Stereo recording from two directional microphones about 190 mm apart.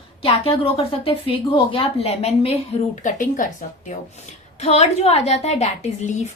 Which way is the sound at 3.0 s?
45° left (ahead or behind).